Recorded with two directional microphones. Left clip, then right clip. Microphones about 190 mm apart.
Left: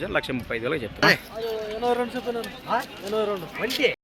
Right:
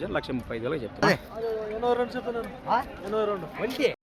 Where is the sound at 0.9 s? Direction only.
55° right (ahead or behind).